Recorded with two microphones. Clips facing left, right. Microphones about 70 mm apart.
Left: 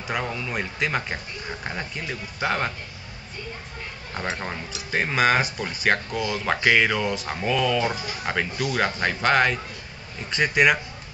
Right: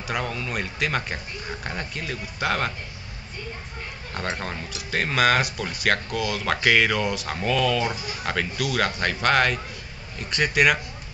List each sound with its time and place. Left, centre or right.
0.2 s speech: centre
4.1 s speech: centre
6.4 s speech: centre
7.2 s speech: centre